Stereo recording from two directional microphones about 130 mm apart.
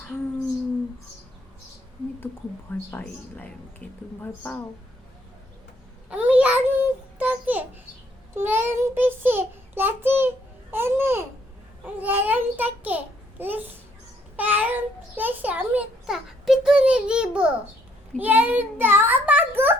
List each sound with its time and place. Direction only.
3.0 s speech: 10° left (ahead or behind)
6.1 s child singing: 10° right (ahead or behind)
13.4 s babbling: 15° right (ahead or behind)
14.3 s a sound: 15° right (ahead or behind)